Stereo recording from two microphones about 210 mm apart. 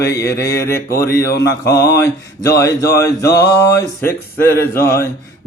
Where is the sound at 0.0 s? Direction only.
15° left (ahead or behind).